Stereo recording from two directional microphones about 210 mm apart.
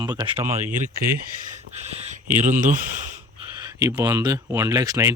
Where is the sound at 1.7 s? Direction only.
30° right (ahead or behind).